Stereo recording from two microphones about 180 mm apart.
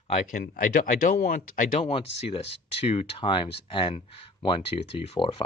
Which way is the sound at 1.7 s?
35° left (ahead or behind).